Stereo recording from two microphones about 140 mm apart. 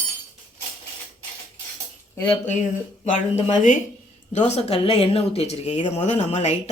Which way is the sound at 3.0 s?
60° left (ahead or behind).